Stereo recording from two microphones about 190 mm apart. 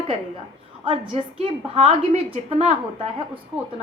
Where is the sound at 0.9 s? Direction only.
30° right (ahead or behind).